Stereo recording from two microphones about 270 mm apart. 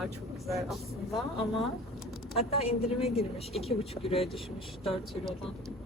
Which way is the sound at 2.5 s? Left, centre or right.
Left.